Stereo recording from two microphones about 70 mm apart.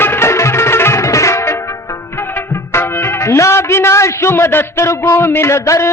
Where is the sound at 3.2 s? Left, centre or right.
Left.